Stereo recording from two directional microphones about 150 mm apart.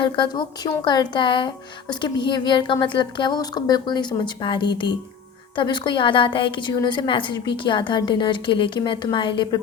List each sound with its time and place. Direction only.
0.0 s a woman's voice: 30° left (ahead or behind)